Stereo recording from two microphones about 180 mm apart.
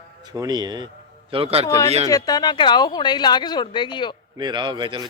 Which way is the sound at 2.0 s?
20° left (ahead or behind).